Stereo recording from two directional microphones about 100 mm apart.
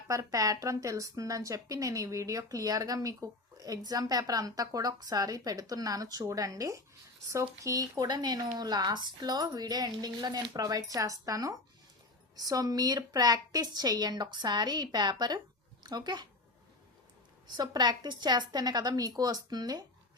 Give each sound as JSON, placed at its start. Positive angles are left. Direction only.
{"t": 0.1, "sound": "speech", "side_deg": -35}
{"t": 17.6, "sound": "speech", "side_deg": -45}